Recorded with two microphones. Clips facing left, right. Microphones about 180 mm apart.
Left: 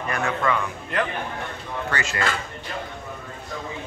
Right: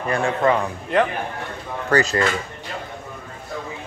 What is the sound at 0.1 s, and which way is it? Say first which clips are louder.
A man's voice: right 5 dB; 30° right (ahead or behind).